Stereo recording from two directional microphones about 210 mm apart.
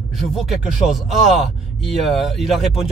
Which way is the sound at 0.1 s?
Centre (ahead or behind).